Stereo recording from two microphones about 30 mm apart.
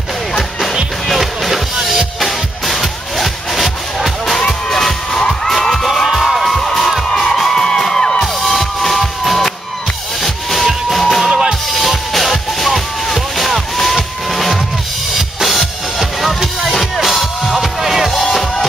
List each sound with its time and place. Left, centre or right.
1.0 s music: centre
4.4 s music: centre
6.5 s music: centre
11.2 s music: right
12.1 s music: centre
17.7 s music: centre
18.1 s music: centre